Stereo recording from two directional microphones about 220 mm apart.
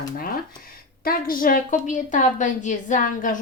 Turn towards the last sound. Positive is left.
turn(degrees=35)  # may be behind; listen again after turning